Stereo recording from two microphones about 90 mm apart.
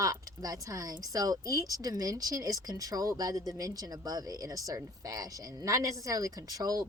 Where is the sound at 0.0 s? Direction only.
40° right (ahead or behind).